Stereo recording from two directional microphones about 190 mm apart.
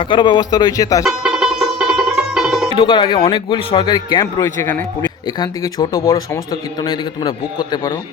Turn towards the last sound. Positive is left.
turn(degrees=20)  # may be behind; listen again after turning